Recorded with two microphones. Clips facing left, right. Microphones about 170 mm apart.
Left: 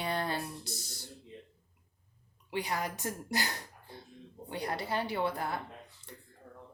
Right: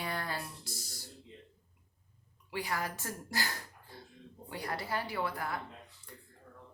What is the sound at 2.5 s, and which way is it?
Speech, 20° left (ahead or behind).